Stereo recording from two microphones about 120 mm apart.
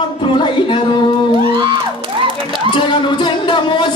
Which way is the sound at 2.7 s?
45° left (ahead or behind).